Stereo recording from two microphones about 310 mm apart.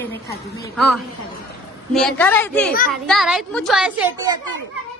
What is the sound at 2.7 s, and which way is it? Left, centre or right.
Speech, left.